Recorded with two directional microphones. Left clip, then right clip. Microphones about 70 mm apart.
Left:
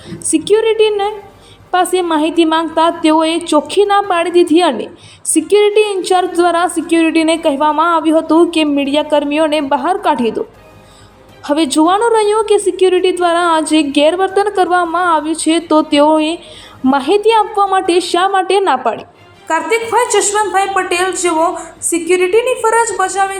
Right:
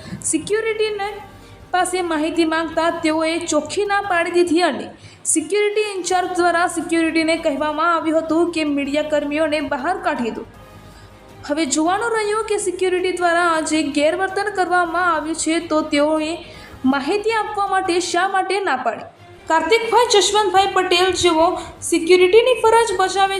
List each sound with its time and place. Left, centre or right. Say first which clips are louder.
0.3 s a woman's voice: left 9 dB; left
11.4 s a woman's voice: left 7 dB; left